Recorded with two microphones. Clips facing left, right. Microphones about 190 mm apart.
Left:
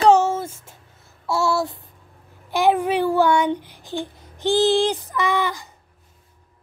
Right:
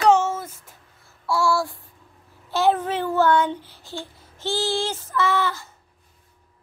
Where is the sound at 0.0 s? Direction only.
35° left (ahead or behind).